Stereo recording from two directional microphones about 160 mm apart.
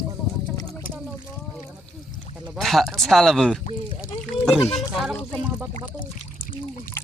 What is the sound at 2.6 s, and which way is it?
Speech, centre (ahead or behind).